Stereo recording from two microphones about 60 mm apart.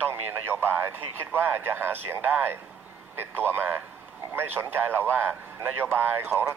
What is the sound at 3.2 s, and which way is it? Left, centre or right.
Speech, right.